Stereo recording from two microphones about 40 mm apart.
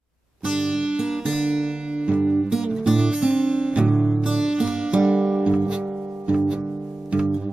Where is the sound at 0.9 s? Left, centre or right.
Centre.